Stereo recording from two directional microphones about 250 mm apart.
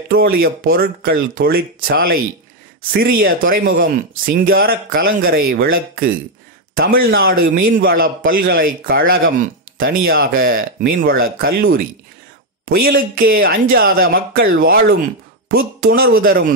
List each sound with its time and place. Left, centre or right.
0.1 s speech: right
15.8 s speech: right